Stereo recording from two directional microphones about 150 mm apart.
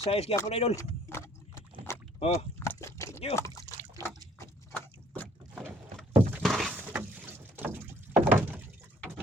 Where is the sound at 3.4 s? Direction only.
20° left (ahead or behind).